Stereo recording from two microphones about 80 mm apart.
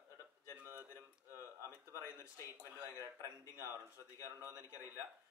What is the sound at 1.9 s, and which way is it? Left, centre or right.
Speech, left.